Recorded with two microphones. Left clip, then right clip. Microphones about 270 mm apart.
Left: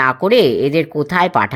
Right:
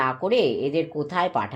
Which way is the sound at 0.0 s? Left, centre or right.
Left.